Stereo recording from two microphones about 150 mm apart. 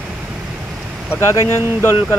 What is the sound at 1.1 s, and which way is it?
Speech, 20° left (ahead or behind).